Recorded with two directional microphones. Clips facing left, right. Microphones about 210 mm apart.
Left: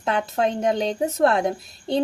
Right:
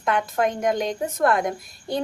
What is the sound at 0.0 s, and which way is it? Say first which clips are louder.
A woman's voice: even; 30° left (ahead or behind).